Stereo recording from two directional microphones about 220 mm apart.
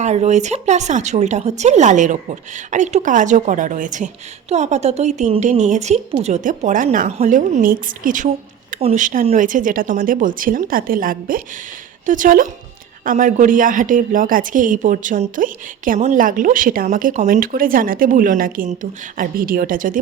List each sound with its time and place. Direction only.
0.0 s a woman's voice: 30° right (ahead or behind)